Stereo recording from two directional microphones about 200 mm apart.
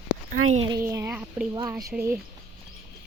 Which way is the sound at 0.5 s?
30° right (ahead or behind).